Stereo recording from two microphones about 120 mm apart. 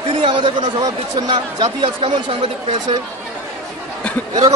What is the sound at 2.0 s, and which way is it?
Speech, 50° right (ahead or behind).